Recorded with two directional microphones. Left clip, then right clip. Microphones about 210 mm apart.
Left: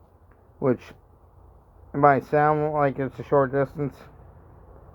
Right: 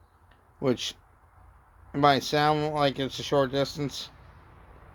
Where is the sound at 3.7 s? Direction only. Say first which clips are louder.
Left 2 dB; 15° left (ahead or behind).